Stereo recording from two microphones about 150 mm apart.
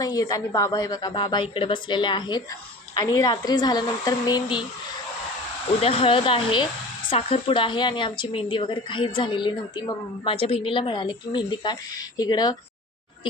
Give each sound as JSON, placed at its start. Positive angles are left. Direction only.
{"t": 0.0, "sound": "a woman's voice", "side_deg": 25}
{"t": 5.8, "sound": "a woman's voice", "side_deg": 40}